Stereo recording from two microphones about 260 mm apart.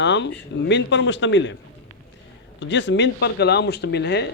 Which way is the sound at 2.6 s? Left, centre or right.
Left.